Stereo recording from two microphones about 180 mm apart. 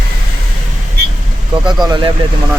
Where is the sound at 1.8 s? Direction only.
25° right (ahead or behind).